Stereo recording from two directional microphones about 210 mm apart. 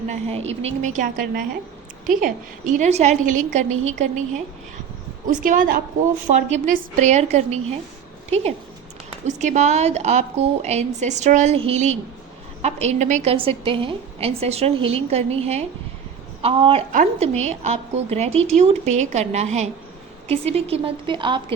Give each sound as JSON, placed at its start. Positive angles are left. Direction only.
{"t": 0.1, "sound": "a woman's voice", "side_deg": -30}
{"t": 5.2, "sound": "a woman's voice", "side_deg": -40}
{"t": 9.2, "sound": "a woman's voice", "side_deg": -35}